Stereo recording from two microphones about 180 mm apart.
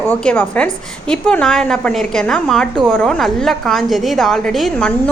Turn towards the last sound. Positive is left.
turn(degrees=5)  # may be behind; listen again after turning